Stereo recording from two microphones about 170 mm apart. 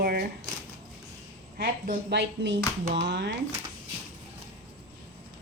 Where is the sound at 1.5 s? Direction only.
55° right (ahead or behind).